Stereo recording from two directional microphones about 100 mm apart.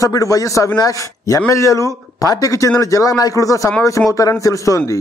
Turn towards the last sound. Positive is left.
turn(degrees=35)  # may be behind; listen again after turning